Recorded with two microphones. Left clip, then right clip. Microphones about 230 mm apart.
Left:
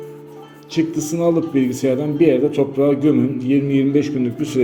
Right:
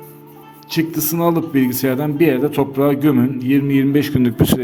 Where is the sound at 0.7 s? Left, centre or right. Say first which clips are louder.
Even; right.